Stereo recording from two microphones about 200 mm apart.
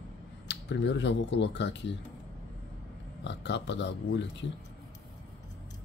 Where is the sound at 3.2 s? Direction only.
60° left (ahead or behind).